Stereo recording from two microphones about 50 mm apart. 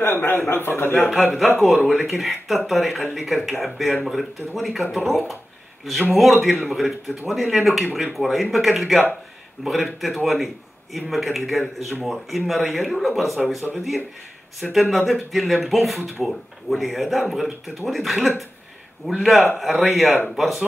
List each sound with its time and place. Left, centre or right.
0.0 s a man's voice: left
1.0 s speech: centre